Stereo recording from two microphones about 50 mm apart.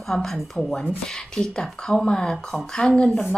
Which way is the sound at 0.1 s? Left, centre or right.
Centre.